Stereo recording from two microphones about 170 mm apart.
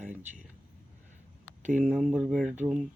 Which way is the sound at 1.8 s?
10° right (ahead or behind).